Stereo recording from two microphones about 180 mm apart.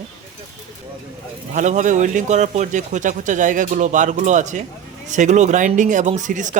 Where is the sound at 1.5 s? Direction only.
40° right (ahead or behind).